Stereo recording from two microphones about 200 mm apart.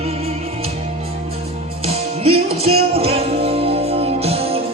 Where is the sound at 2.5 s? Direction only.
30° right (ahead or behind).